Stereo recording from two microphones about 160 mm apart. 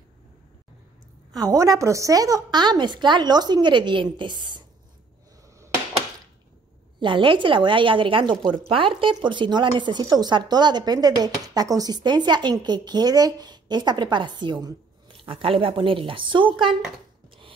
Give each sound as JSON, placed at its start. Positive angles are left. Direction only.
{"t": 1.3, "sound": "a woman's voice", "side_deg": -25}
{"t": 7.0, "sound": "a woman's voice", "side_deg": -30}